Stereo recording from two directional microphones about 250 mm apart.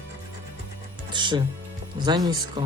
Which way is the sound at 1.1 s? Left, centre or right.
Centre.